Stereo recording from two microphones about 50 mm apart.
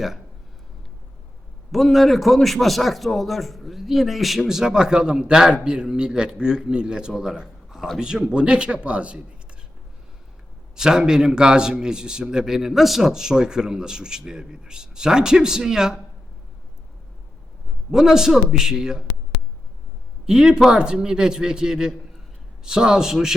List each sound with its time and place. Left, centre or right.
1.7 s a man's voice: centre; by 9.2 s right
10.8 s a man's voice: centre
17.9 s a man's voice: centre
20.2 s a man's voice: centre